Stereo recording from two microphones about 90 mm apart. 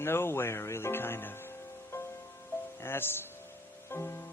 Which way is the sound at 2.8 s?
25° left (ahead or behind).